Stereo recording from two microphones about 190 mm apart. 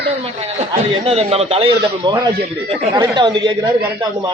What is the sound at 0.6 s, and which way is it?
A man's voice, 30° right (ahead or behind).